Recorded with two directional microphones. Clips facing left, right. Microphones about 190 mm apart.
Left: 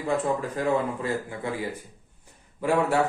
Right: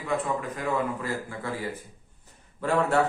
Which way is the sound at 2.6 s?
10° left (ahead or behind).